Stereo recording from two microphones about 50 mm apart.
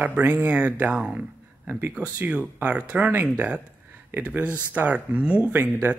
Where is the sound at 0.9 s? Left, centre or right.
Right.